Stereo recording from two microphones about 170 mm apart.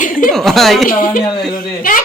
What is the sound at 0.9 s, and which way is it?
Speech, 55° left (ahead or behind).